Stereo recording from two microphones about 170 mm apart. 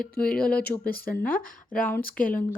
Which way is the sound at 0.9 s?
60° left (ahead or behind).